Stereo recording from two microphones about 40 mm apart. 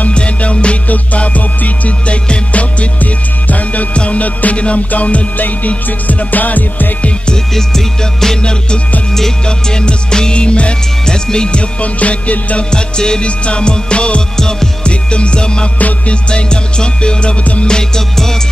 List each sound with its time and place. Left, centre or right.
0.1 s music: left
7.5 s music: centre
8.4 s music: left
11.8 s music: left
12.7 s music: centre
14.3 s music: centre
14.9 s music: left